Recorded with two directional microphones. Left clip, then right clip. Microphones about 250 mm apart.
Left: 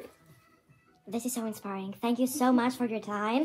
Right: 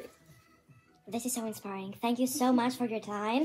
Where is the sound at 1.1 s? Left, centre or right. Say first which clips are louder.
Left 1 dB; centre.